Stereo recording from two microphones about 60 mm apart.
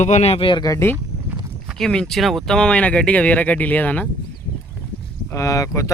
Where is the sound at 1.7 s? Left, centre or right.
Centre; by 4.0 s left.